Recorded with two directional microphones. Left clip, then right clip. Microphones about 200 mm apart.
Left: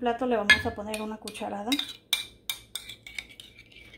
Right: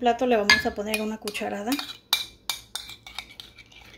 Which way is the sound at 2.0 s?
15° left (ahead or behind).